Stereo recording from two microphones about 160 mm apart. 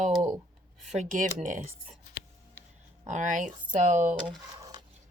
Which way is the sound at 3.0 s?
50° right (ahead or behind).